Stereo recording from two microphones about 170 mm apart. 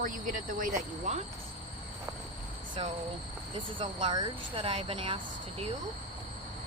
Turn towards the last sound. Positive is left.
turn(degrees=-35)  # may be behind; listen again after turning